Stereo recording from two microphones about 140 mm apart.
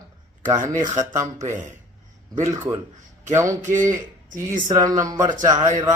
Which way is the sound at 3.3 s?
20° right (ahead or behind).